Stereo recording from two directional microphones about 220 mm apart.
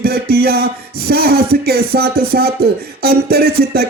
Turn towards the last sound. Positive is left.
turn(degrees=-45)  # may be behind; listen again after turning